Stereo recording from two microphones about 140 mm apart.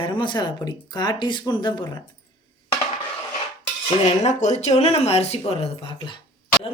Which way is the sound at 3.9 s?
55° left (ahead or behind).